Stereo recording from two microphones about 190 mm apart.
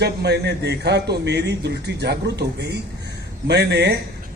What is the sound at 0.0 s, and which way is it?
A man's voice, 60° right (ahead or behind).